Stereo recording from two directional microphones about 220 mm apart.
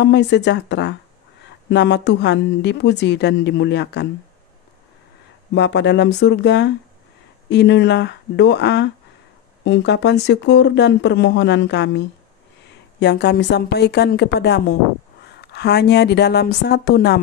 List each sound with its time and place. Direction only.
0.0 s a woman's voice: 50° left (ahead or behind)
5.5 s a woman's voice: 50° left (ahead or behind)